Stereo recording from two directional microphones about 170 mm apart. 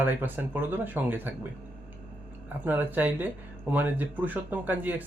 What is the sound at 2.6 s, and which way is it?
Speech, 10° right (ahead or behind).